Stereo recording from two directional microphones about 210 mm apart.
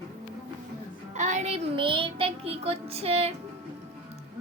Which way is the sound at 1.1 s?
35° right (ahead or behind).